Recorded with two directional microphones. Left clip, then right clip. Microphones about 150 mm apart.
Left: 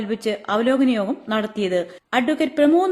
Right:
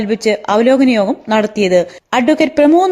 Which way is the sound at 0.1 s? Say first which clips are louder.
Right 9 dB; 40° right (ahead or behind).